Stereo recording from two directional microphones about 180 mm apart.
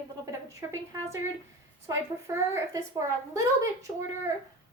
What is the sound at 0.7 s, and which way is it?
A woman's voice, 15° right (ahead or behind).